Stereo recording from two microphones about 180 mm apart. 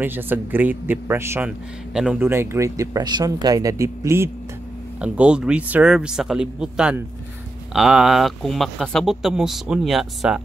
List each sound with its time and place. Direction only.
0.0 s speech: 10° right (ahead or behind)